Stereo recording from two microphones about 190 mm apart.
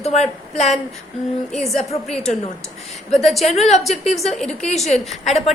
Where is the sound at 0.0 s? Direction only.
35° left (ahead or behind).